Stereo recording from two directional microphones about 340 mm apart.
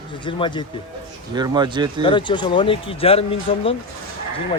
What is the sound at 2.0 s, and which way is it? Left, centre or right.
Speech, centre.